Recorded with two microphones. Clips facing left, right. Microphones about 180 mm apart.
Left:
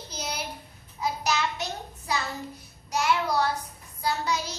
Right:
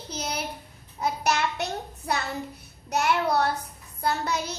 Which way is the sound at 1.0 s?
60° right (ahead or behind).